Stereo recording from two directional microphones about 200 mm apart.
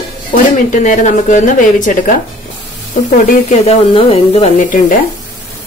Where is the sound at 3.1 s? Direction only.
30° left (ahead or behind).